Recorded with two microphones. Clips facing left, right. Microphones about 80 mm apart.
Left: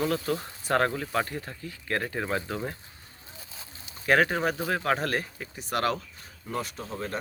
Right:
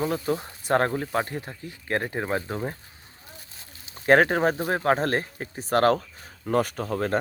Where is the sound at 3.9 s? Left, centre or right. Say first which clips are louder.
Right 5 dB; right.